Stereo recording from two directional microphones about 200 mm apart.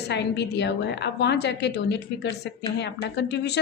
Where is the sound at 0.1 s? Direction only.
55° left (ahead or behind).